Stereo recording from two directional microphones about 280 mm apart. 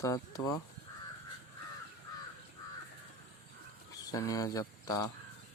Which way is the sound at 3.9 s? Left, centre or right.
Centre.